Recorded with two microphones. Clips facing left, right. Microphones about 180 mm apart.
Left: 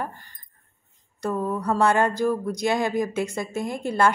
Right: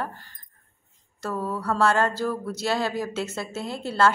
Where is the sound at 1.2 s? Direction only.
20° left (ahead or behind).